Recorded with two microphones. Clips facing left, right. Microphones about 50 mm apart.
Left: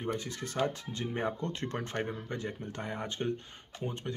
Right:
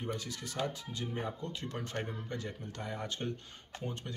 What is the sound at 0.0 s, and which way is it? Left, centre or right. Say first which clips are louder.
Speech: left 4 dB; left.